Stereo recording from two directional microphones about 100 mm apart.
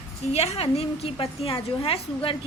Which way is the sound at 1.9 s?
65° left (ahead or behind).